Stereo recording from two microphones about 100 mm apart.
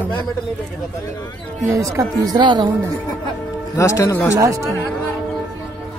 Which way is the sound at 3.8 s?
30° left (ahead or behind).